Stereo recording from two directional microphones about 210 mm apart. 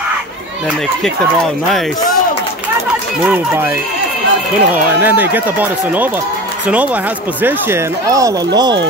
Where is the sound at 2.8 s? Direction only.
10° right (ahead or behind).